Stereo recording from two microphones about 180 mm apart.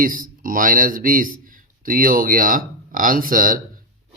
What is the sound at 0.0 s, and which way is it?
Speech, 50° right (ahead or behind).